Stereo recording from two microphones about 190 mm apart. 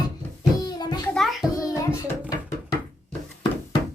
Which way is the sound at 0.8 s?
20° left (ahead or behind).